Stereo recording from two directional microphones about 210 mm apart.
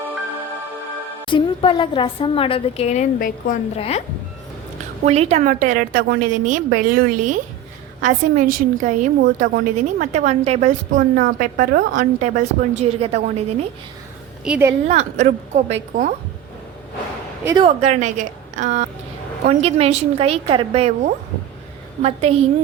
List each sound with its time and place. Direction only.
1.2 s a woman's voice: 20° left (ahead or behind); by 3.6 s 40° left (ahead or behind)
3.8 s a woman's voice: 30° left (ahead or behind)
5.0 s a woman's voice: 30° right (ahead or behind)
14.4 s a woman's voice: 5° right (ahead or behind)
14.8 s a woman's voice: 35° right (ahead or behind)
17.4 s a woman's voice: 15° right (ahead or behind)
17.7 s a woman's voice: 30° right (ahead or behind)